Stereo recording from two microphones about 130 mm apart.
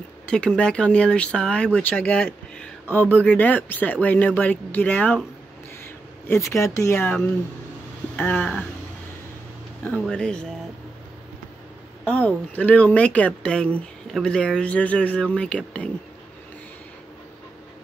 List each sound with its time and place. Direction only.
0.3 s speech: 5° left (ahead or behind)
6.2 s speech: 20° left (ahead or behind)
8.2 s speech: 10° left (ahead or behind)
9.8 s speech: 10° left (ahead or behind)
12.1 s speech: 10° left (ahead or behind)